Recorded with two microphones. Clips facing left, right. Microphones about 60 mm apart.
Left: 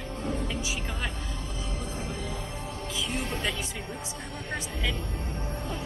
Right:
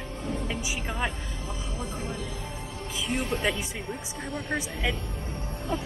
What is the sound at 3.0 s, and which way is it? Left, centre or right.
Speech, centre.